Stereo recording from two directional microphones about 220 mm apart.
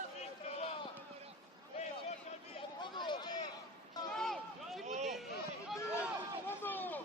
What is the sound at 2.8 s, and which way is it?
Run, 20° left (ahead or behind).